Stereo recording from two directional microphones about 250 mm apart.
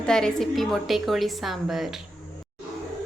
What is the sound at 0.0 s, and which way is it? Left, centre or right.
A woman's voice, centre.